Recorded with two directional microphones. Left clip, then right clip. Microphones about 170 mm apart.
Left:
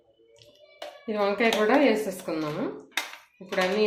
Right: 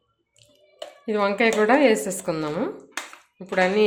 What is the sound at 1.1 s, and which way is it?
Speech, 65° right (ahead or behind).